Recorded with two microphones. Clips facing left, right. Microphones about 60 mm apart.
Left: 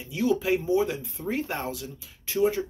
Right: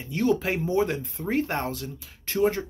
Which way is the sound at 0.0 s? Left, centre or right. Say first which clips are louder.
Right 1 dB; right.